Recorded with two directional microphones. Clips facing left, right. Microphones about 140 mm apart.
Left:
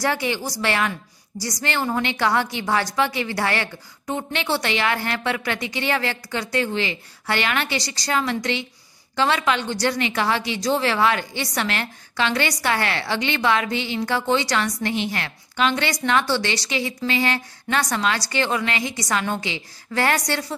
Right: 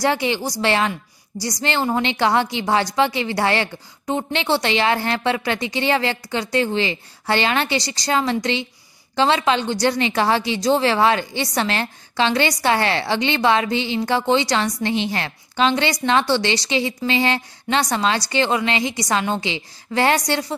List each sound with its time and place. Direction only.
0.0 s a woman's voice: 25° right (ahead or behind)